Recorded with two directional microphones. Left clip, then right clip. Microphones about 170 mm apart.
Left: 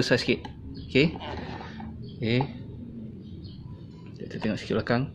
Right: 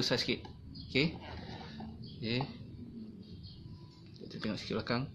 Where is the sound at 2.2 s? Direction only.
20° left (ahead or behind).